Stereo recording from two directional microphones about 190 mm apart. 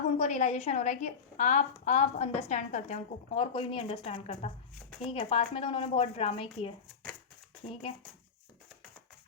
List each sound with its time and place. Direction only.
0.2 s a woman's voice: 35° left (ahead or behind)